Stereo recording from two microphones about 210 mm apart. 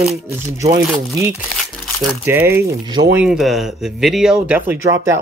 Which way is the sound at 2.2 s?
10° right (ahead or behind).